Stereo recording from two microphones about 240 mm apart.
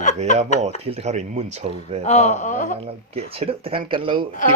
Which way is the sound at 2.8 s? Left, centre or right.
Right.